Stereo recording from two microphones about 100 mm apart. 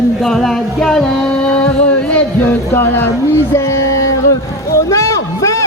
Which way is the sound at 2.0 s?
20° left (ahead or behind).